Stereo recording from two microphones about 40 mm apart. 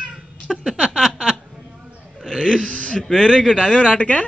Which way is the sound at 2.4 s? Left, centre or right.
Centre.